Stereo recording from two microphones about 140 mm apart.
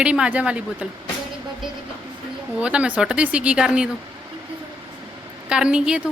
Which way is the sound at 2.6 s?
10° right (ahead or behind).